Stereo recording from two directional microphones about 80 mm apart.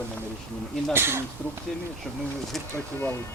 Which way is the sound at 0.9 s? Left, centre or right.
Right.